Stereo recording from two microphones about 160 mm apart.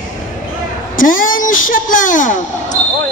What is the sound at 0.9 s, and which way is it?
Speech, 60° left (ahead or behind).